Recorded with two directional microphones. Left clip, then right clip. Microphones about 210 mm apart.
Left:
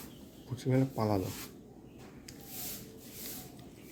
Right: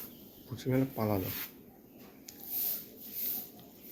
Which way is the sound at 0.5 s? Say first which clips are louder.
Even; centre (ahead or behind).